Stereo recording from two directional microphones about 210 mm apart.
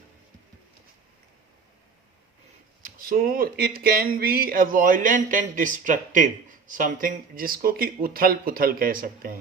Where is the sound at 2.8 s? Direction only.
45° right (ahead or behind).